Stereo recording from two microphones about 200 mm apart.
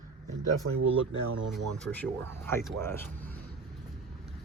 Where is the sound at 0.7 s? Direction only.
85° right.